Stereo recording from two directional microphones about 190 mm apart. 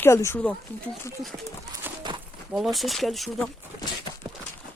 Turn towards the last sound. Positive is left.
turn(degrees=0)  # may be behind; listen again after turning